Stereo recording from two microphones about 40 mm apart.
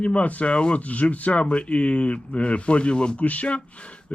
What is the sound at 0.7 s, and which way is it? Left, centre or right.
Speech, left.